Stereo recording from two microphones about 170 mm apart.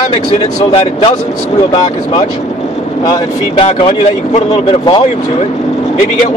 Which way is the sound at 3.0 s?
30° left (ahead or behind).